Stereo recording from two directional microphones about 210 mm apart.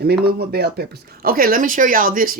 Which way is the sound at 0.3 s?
50° right (ahead or behind).